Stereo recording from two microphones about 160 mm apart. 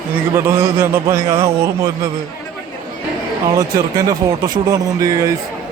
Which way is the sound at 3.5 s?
20° right (ahead or behind).